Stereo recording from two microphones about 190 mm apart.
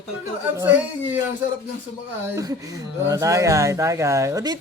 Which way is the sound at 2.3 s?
15° right (ahead or behind).